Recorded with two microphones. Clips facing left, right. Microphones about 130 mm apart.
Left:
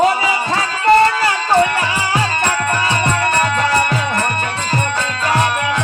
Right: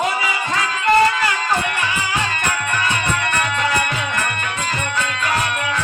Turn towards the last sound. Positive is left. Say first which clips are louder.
# left 5 dB
turn(degrees=35)  # may be behind; listen again after turning